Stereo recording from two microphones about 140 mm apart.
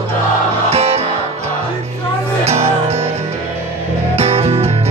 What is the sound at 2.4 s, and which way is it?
Music, 50° right (ahead or behind).